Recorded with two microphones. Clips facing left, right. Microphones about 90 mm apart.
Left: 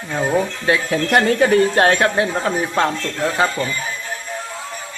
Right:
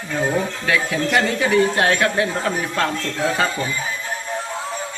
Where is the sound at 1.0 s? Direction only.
45° left (ahead or behind).